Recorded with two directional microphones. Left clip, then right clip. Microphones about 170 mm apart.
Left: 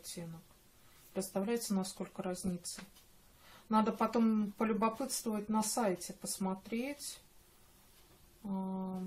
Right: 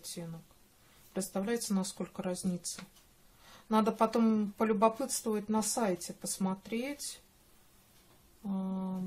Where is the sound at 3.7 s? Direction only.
30° right (ahead or behind).